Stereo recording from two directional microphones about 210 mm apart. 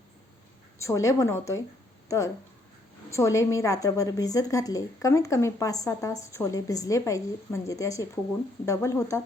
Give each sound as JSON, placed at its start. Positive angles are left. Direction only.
{"t": 0.8, "sound": "a woman's voice", "side_deg": 15}